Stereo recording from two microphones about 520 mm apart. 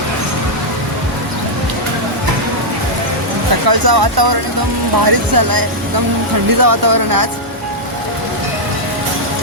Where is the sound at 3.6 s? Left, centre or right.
Right.